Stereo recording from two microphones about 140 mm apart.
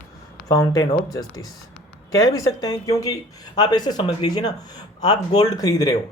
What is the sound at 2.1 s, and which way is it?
Speech, 25° left (ahead or behind).